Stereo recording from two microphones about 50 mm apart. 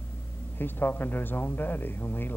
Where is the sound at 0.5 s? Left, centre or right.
Left.